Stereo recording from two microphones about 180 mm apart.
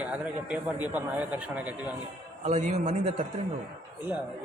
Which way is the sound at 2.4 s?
40° right (ahead or behind).